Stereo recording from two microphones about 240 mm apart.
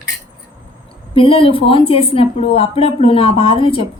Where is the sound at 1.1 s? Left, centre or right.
Left.